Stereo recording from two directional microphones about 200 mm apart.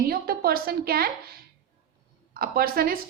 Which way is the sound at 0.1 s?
50° right (ahead or behind).